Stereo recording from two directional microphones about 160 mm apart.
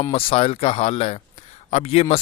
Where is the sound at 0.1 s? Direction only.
35° left (ahead or behind).